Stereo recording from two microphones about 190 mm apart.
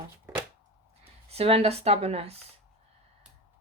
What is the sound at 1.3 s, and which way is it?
Speech, 30° right (ahead or behind).